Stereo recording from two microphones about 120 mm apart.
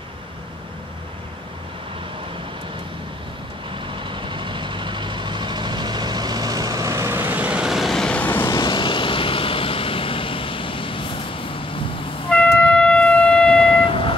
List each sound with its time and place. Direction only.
4.1 s vehicle: 40° right (ahead or behind); by 8.5 s 15° left (ahead or behind)
8.5 s vehicle: 40° left (ahead or behind)
12.3 s music: 10° left (ahead or behind)
13.8 s vehicle: 50° left (ahead or behind)